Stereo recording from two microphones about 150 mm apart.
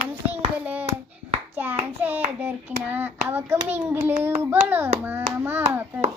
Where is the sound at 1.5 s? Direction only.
10° right (ahead or behind).